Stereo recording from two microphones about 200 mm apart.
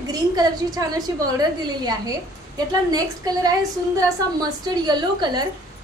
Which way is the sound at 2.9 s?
20° right (ahead or behind).